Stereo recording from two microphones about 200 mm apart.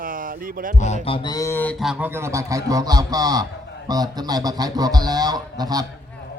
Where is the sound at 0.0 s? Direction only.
45° right (ahead or behind).